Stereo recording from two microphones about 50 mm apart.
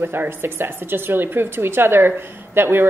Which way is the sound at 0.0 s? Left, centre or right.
Right.